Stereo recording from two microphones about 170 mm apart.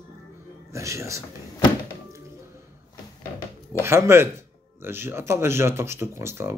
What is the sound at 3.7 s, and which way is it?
Speech, 15° right (ahead or behind).